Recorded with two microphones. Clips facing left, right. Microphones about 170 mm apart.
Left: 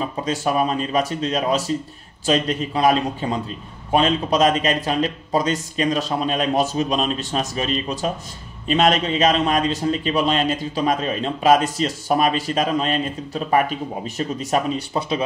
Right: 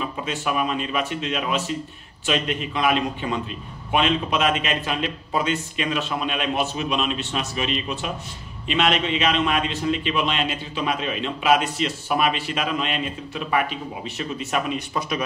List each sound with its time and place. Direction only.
0.0 s a man's voice: 35° left (ahead or behind)